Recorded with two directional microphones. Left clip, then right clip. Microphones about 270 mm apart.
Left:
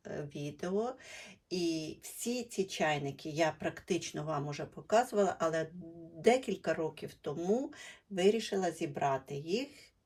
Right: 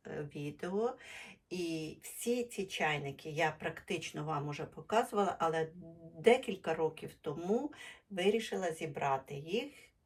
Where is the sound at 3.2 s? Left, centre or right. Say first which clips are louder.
Left 1 dB; left.